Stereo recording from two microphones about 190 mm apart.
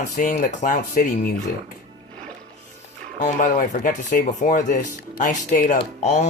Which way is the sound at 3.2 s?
45° left (ahead or behind).